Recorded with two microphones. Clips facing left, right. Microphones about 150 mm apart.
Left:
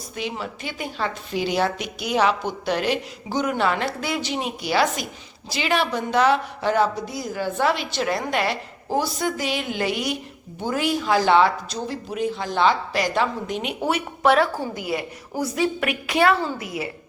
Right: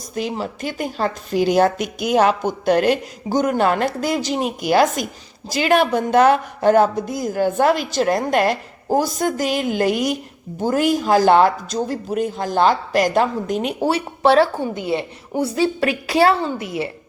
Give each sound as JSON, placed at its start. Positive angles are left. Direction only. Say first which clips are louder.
{"t": 0.1, "sound": "a woman's voice", "louder": "right 6 dB", "side_deg": -40}